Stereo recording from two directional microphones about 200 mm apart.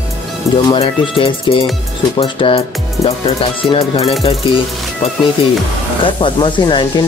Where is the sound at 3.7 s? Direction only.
30° left (ahead or behind).